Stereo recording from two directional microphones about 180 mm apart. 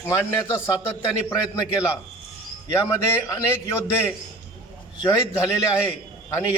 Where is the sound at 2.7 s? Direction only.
15° left (ahead or behind).